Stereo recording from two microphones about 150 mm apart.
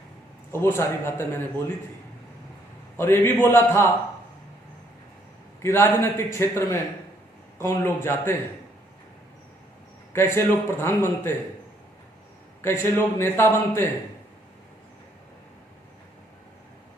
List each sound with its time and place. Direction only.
0.5 s a man's voice: 15° left (ahead or behind)
3.0 s a man's voice: 15° left (ahead or behind)
5.6 s a man's voice: 20° left (ahead or behind)
10.1 s a man's voice: 15° left (ahead or behind)
12.6 s a man's voice: 15° left (ahead or behind)